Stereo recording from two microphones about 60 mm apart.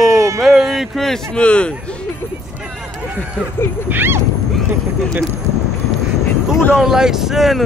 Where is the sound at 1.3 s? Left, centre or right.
Centre.